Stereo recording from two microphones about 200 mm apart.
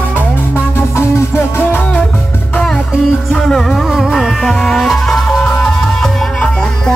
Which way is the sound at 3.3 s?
Centre (ahead or behind).